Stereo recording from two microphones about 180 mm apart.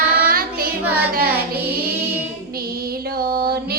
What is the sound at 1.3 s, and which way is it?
Child singing, 10° right (ahead or behind).